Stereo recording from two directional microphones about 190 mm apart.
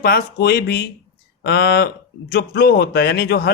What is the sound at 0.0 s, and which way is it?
A man's voice, 55° left (ahead or behind).